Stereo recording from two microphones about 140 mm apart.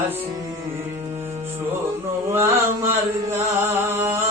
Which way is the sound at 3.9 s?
20° right (ahead or behind).